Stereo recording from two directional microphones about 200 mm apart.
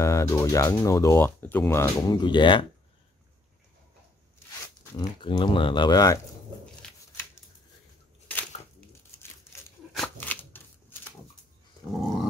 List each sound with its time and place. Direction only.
0.0 s speech: 15° left (ahead or behind)
4.9 s speech: 20° left (ahead or behind)
6.6 s a sound: 5° left (ahead or behind)
9.9 s scissors: 5° left (ahead or behind)
11.9 s dog: centre (ahead or behind)